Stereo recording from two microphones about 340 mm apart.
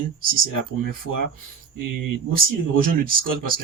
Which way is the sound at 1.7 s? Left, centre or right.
Right.